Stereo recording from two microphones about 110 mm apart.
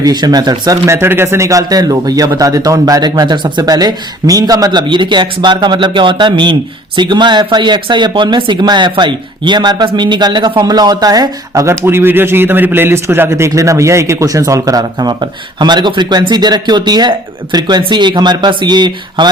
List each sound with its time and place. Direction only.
0.0 s speech: 40° right (ahead or behind)
14.9 s speech: 45° right (ahead or behind)